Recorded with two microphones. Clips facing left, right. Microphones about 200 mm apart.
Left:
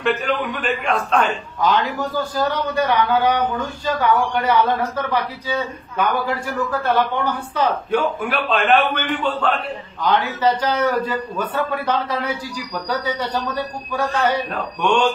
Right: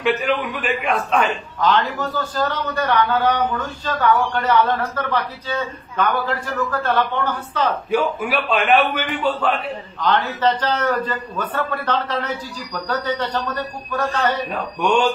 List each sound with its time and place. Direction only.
0.3 s a man's voice: 5° right (ahead or behind)
1.6 s a man's voice: 10° left (ahead or behind)
7.9 s a man's voice: 5° right (ahead or behind)
10.0 s a man's voice: 10° left (ahead or behind)
14.5 s a man's voice: 10° right (ahead or behind)